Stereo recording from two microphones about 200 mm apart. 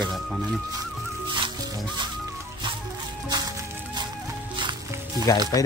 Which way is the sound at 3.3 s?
20° right (ahead or behind).